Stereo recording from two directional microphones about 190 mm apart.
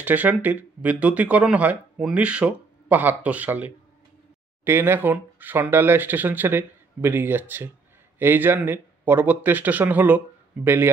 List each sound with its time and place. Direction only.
0.0 s speech: 10° right (ahead or behind)